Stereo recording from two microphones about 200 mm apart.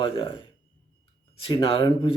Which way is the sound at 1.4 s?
25° left (ahead or behind).